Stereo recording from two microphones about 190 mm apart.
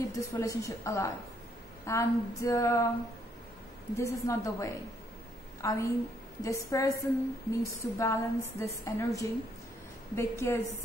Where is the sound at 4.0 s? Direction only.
15° left (ahead or behind).